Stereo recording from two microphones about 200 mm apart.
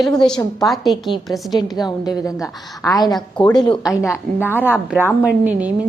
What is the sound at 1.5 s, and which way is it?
Speech, 20° left (ahead or behind).